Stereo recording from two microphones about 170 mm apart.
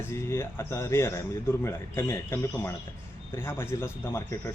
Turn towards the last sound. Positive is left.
turn(degrees=15)  # may be behind; listen again after turning